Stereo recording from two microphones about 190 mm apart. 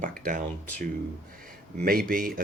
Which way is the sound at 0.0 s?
45° right (ahead or behind).